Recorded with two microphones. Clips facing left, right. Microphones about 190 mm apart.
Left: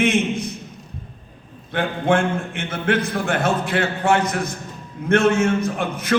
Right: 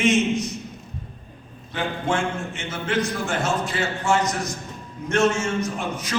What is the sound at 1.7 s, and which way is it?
A man's voice, 55° left (ahead or behind).